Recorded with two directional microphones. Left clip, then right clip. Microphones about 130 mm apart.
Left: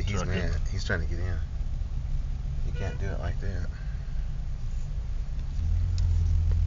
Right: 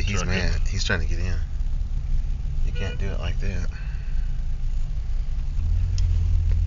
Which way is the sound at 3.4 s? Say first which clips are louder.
Right 5 dB; 30° right (ahead or behind).